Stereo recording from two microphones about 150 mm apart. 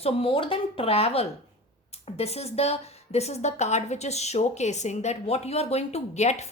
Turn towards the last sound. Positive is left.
turn(degrees=50)  # may be behind; listen again after turning